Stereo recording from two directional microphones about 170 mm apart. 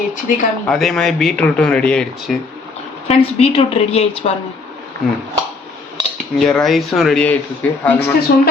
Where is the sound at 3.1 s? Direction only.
35° left (ahead or behind).